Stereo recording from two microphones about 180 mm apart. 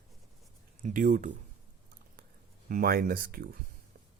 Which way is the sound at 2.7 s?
50° right (ahead or behind).